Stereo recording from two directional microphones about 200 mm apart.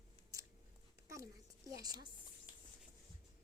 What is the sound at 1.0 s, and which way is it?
Speech, 15° right (ahead or behind).